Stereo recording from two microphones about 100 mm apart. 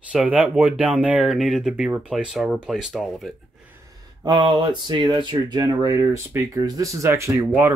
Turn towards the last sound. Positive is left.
turn(degrees=-25)  # may be behind; listen again after turning